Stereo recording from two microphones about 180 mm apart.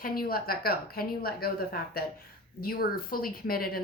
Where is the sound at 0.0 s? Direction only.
55° left (ahead or behind).